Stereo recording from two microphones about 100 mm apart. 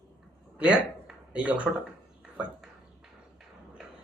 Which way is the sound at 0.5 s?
10° right (ahead or behind).